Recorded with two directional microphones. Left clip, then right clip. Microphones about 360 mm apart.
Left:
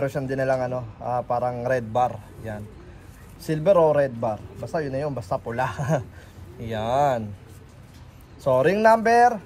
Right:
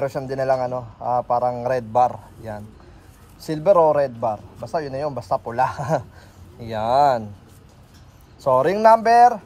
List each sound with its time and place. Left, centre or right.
0.0 s a man's voice: centre
8.5 s a man's voice: centre